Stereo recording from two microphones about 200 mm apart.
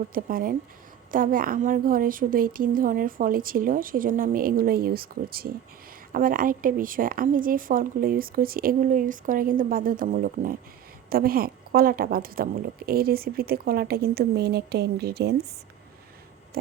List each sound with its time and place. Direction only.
0.1 s a woman's voice: 45° right (ahead or behind)